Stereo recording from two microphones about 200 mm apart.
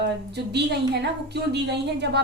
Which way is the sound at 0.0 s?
55° right (ahead or behind).